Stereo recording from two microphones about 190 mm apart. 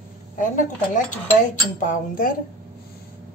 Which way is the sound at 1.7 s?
45° left (ahead or behind).